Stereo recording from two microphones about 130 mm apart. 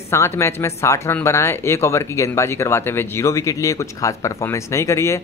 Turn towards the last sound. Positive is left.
turn(degrees=20)  # may be behind; listen again after turning